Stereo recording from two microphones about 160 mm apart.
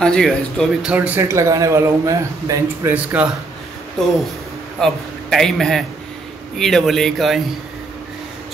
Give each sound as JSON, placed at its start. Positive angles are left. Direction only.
{"t": 0.0, "sound": "speech", "side_deg": 5}
{"t": 0.9, "sound": "a man's voice", "side_deg": -10}
{"t": 4.7, "sound": "a man's voice", "side_deg": 0}